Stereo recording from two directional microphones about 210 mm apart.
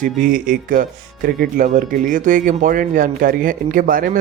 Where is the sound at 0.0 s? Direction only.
40° right (ahead or behind).